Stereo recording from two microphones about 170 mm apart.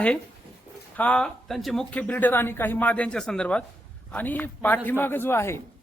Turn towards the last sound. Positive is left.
turn(degrees=15)  # may be behind; listen again after turning